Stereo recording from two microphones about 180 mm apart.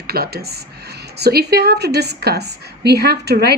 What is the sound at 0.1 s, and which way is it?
Speech, 60° right (ahead or behind).